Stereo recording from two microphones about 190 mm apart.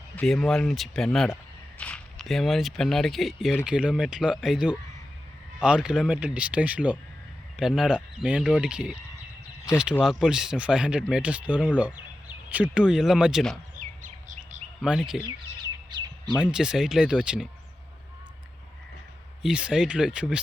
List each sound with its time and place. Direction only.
0.2 s speech: centre (ahead or behind)
10.0 s speech: 5° right (ahead or behind)
13.7 s bird: 40° right (ahead or behind)
14.8 s speech: centre (ahead or behind)
15.9 s bird: 20° right (ahead or behind)
16.3 s speech: 5° right (ahead or behind)
19.4 s speech: 5° right (ahead or behind)